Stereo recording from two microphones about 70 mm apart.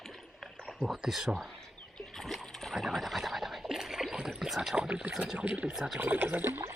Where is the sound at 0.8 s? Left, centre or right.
Centre.